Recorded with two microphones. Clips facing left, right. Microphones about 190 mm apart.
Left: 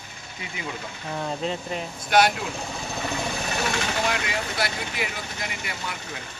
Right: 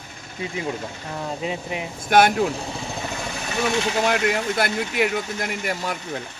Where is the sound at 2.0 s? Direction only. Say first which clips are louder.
Right 3 dB; 50° right (ahead or behind).